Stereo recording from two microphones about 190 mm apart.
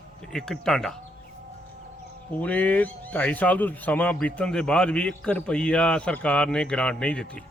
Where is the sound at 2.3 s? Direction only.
10° left (ahead or behind).